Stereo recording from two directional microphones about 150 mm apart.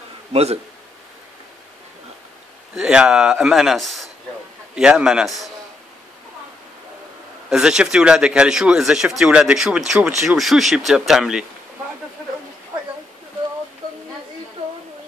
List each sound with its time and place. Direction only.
0.3 s a man's voice: 45° right (ahead or behind)
2.7 s speech: 5° right (ahead or behind)
7.4 s speech: 5° right (ahead or behind)